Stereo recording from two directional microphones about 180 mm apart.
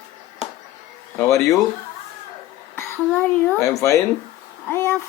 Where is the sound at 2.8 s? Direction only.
10° left (ahead or behind).